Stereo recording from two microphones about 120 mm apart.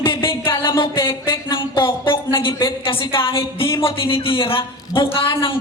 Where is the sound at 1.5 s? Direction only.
45° left (ahead or behind).